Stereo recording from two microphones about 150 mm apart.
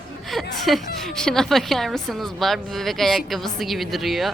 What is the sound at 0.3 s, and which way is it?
Speech, centre (ahead or behind).